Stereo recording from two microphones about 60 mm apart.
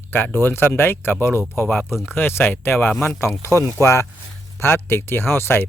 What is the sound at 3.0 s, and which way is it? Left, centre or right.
Speech, left.